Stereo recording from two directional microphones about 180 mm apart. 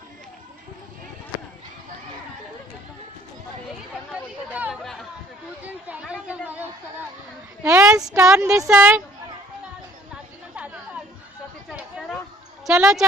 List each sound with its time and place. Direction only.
4.1 s chatter: 5° right (ahead or behind)
7.6 s a sound: 5° right (ahead or behind)
8.2 s speech: 15° right (ahead or behind)
8.5 s speech: 5° right (ahead or behind)
11.7 s a sound: 5° right (ahead or behind)
12.6 s speech: 5° right (ahead or behind)